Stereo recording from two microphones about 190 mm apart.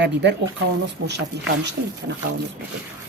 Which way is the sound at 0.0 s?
65° right (ahead or behind).